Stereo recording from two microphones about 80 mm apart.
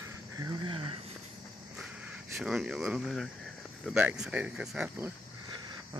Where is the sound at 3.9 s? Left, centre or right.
Centre.